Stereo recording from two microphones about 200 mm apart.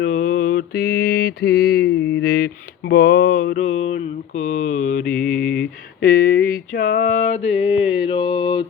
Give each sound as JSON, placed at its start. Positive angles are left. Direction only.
{"t": 0.0, "sound": "mantra", "side_deg": 45}
{"t": 5.0, "sound": "mantra", "side_deg": 5}
{"t": 6.0, "sound": "mantra", "side_deg": 50}